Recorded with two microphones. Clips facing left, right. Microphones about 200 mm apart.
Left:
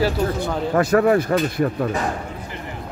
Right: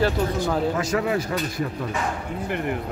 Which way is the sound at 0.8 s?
55° left (ahead or behind).